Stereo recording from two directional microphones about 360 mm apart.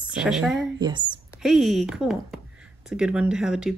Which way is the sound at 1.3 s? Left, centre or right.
Centre.